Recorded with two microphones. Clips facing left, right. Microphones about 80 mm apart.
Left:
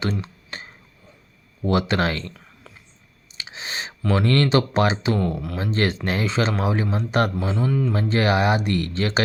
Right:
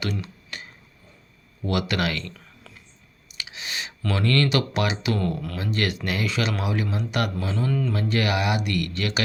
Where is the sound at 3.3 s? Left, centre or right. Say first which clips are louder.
Left 2 dB; left.